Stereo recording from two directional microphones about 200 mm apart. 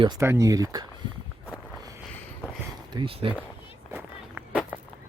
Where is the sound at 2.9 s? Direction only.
25° right (ahead or behind).